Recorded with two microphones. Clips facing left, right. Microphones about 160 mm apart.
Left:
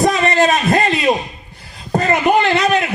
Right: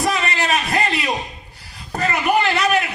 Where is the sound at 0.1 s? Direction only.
20° left (ahead or behind).